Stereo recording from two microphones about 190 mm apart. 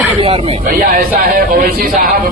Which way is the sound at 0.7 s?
50° right (ahead or behind).